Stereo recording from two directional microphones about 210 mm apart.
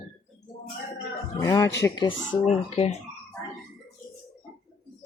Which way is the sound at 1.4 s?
15° left (ahead or behind).